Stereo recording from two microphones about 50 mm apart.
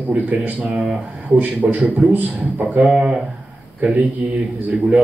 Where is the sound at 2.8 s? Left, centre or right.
Centre.